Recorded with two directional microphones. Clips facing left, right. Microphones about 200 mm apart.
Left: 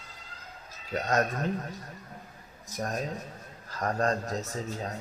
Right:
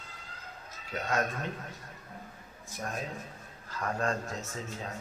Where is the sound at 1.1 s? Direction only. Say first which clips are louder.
Left 4 dB; 40° left (ahead or behind).